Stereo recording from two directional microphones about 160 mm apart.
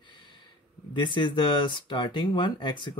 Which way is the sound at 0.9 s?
30° left (ahead or behind).